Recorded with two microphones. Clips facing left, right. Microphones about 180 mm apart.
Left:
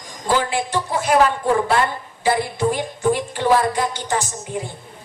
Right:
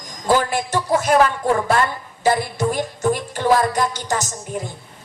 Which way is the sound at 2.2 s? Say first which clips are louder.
Even; 45° right (ahead or behind).